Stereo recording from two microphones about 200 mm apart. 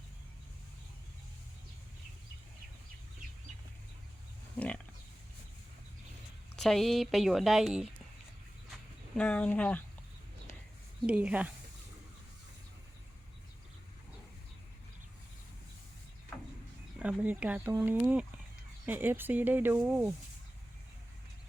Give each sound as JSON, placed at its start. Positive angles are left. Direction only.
{"t": 4.5, "sound": "a sound", "side_deg": 5}
{"t": 6.6, "sound": "speech", "side_deg": 0}
{"t": 9.1, "sound": "speech", "side_deg": 5}
{"t": 11.0, "sound": "speech", "side_deg": -5}
{"t": 17.0, "sound": "speech", "side_deg": -5}